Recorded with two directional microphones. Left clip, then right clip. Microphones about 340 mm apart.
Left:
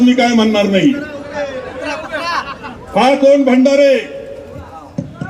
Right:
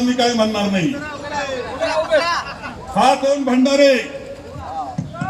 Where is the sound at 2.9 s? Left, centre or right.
Left.